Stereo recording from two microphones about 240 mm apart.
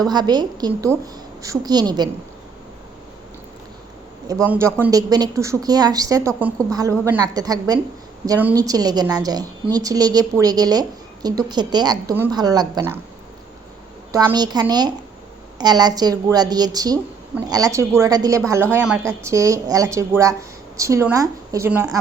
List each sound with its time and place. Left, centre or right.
0.1 s a woman's voice: centre
4.3 s a woman's voice: centre
14.1 s a woman's voice: centre